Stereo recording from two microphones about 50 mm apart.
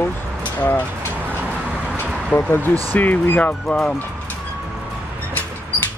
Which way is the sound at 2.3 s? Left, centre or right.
Left.